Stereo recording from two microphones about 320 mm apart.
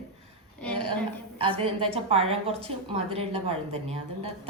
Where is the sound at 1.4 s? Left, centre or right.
Centre.